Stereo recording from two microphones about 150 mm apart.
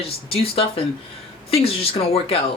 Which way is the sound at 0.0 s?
40° left (ahead or behind).